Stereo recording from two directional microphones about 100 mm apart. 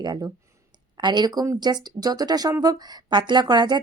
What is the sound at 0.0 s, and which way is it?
A woman's voice, 45° right (ahead or behind).